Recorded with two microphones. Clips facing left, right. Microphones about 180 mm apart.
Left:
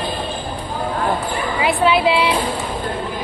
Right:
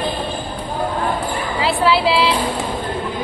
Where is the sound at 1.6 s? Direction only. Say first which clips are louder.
Even; 15° left (ahead or behind).